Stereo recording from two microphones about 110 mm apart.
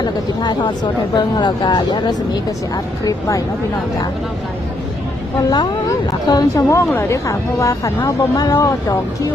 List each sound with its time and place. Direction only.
0.0 s speech: 40° left (ahead or behind)
5.5 s speech: 35° left (ahead or behind)